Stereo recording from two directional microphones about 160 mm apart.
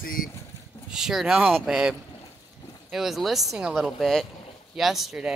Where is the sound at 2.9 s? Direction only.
Centre (ahead or behind).